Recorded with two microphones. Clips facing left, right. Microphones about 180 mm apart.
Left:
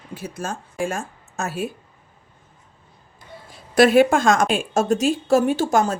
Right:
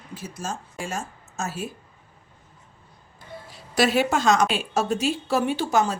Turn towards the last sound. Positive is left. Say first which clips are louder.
# left 3 dB
turn(degrees=45)  # may be behind; listen again after turning